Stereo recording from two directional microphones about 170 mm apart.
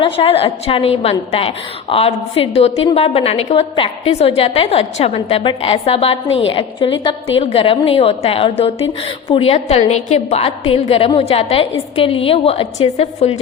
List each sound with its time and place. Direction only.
0.0 s a woman's voice: 35° left (ahead or behind)